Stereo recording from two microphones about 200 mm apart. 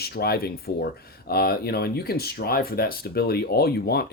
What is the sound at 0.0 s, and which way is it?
Speech, 50° left (ahead or behind).